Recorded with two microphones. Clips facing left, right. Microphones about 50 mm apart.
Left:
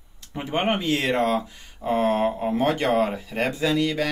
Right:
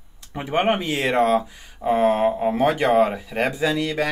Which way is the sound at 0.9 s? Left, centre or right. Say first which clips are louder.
Right 5 dB; centre.